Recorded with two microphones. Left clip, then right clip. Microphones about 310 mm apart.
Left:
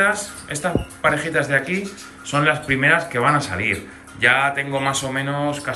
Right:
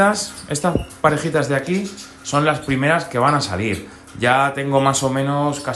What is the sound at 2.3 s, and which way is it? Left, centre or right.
Speech, centre.